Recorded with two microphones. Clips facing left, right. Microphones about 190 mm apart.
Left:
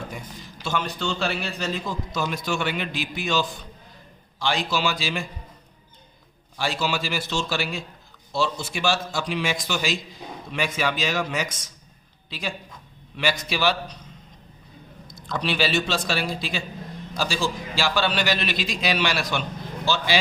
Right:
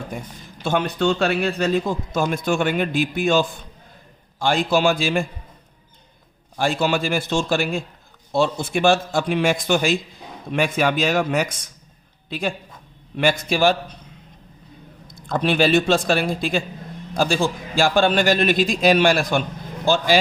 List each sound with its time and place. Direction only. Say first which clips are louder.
0.6 s a man's voice: right 7 dB; 55° right (ahead or behind)
6.6 s a man's voice: right 6 dB; 50° right (ahead or behind)
15.0 s a man's voice: right 6 dB; 50° right (ahead or behind)